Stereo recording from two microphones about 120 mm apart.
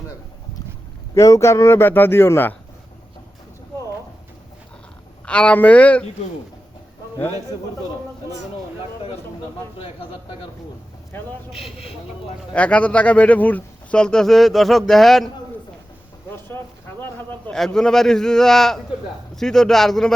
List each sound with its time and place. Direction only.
1.1 s speech: 25° left (ahead or behind)
5.2 s speech: 10° left (ahead or behind)
9.7 s speech: 50° left (ahead or behind)
12.5 s speech: 10° left (ahead or behind)
16.5 s a sound: 25° left (ahead or behind)
17.0 s a sound: 15° left (ahead or behind)
17.5 s speech: 5° left (ahead or behind)